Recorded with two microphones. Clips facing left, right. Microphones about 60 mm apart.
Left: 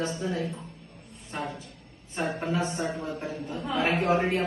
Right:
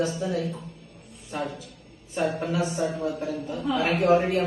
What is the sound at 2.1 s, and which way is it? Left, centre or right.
Speech, left.